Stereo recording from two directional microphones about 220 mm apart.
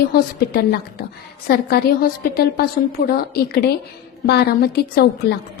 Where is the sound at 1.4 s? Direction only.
45° left (ahead or behind).